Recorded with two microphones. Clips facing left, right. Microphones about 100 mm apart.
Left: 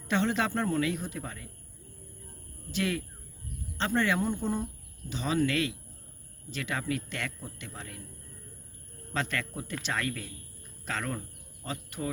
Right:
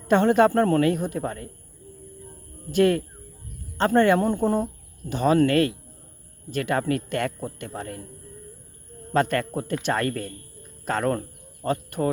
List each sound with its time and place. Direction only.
0.1 s speech: 50° right (ahead or behind)
2.7 s speech: 50° right (ahead or behind)
9.1 s speech: 50° right (ahead or behind)